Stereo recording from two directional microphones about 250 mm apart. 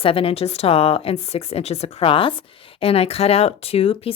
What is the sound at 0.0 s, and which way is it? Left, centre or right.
A woman's voice, left.